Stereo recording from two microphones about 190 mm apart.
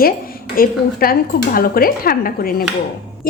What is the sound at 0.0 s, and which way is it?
A woman's voice, 50° left (ahead or behind).